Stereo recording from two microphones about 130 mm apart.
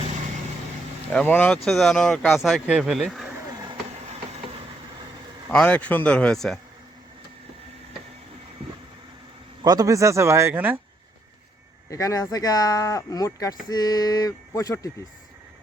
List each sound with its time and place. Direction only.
1.1 s speech: 10° left (ahead or behind)
1.5 s speech: centre (ahead or behind)
5.5 s speech: 10° left (ahead or behind)
9.6 s speech: 25° right (ahead or behind)
11.9 s speech: 25° left (ahead or behind)